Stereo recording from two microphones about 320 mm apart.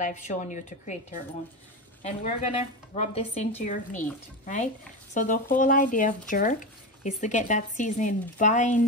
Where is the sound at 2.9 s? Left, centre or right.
Left.